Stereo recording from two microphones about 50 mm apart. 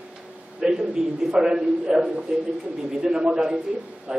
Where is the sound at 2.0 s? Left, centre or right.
Right.